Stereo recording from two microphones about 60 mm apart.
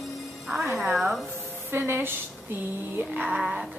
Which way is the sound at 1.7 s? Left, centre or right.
Right.